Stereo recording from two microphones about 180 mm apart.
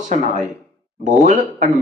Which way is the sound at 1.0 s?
45° right (ahead or behind).